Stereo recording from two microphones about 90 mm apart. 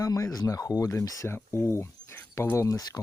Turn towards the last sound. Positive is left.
turn(degrees=40)  # may be behind; listen again after turning